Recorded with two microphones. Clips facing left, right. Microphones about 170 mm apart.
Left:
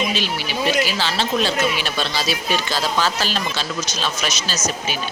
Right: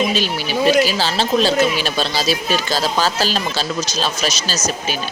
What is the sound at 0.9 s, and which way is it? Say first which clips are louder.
Speech: right 4 dB; 35° right (ahead or behind).